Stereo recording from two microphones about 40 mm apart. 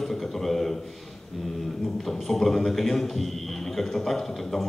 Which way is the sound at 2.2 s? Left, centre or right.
Centre.